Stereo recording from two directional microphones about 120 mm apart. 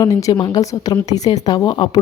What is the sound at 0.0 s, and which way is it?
A woman's voice, 30° left (ahead or behind).